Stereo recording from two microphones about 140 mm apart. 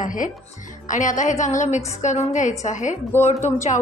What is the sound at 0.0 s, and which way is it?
Music, 70° left (ahead or behind).